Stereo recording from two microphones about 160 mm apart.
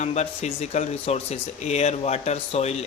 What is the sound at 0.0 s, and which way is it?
Speech, 45° left (ahead or behind).